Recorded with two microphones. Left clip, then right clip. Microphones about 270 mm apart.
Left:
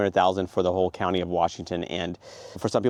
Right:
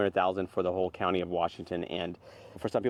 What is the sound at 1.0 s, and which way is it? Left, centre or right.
Speech, left.